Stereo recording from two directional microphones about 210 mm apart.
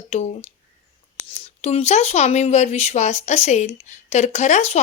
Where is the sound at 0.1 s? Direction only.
30° left (ahead or behind).